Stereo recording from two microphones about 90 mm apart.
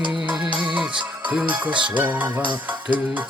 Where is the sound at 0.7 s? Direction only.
10° right (ahead or behind).